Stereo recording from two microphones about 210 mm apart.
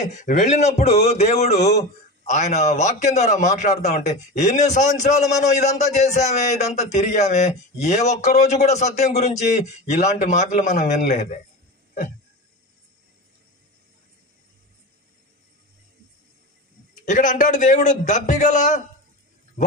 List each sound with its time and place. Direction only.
0.1 s a man's voice: 35° left (ahead or behind)
5.2 s a man's voice: 15° left (ahead or behind)
5.6 s a man's voice: 35° left (ahead or behind)
17.0 s a man's voice: 35° left (ahead or behind)